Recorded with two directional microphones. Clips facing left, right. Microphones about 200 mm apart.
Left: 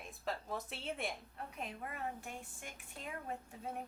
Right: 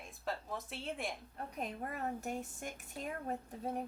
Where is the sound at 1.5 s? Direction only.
40° right (ahead or behind).